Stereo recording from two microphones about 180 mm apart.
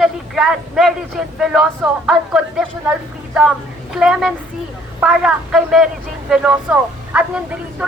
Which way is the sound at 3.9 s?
5° right (ahead or behind).